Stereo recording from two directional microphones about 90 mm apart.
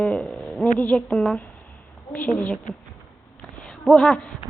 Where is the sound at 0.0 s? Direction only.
15° left (ahead or behind).